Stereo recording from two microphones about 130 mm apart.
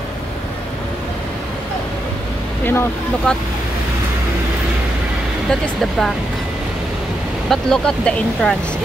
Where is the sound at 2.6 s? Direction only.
15° left (ahead or behind).